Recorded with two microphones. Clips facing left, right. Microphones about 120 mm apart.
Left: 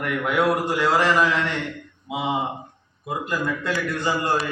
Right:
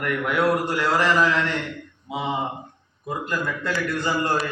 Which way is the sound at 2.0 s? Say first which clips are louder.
Left 2 dB; 10° left (ahead or behind).